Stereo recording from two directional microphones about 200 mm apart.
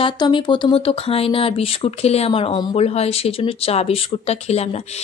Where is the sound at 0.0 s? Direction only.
25° left (ahead or behind).